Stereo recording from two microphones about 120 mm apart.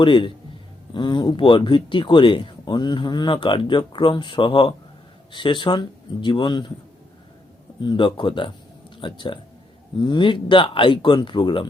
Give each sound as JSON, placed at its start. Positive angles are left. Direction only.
{"t": 0.0, "sound": "a man's voice", "side_deg": 40}
{"t": 7.8, "sound": "speech", "side_deg": 40}